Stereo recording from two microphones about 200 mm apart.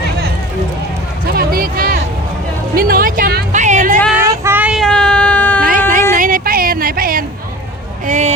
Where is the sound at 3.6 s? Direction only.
40° right (ahead or behind).